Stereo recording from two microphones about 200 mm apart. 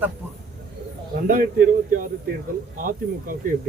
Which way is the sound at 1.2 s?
45° right (ahead or behind).